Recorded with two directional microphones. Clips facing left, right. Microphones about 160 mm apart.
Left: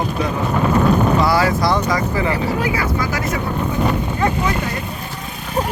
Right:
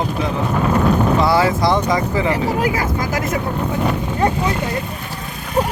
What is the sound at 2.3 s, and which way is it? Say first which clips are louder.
Speech: right 1 dB; 45° right (ahead or behind).